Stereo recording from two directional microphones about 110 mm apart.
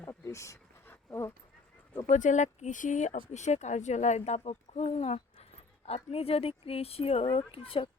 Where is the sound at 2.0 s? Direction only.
90° left.